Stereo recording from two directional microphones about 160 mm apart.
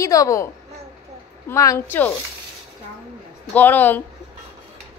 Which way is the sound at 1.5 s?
20° left (ahead or behind).